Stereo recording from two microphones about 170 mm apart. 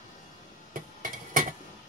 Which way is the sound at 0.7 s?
55° right (ahead or behind).